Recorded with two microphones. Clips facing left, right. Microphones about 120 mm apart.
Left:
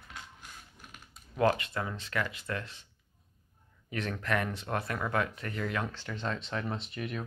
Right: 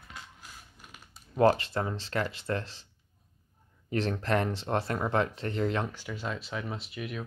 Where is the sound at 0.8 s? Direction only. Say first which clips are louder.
Even; centre (ahead or behind).